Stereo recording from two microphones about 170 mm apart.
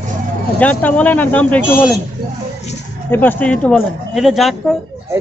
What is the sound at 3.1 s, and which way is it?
Speech, 10° left (ahead or behind).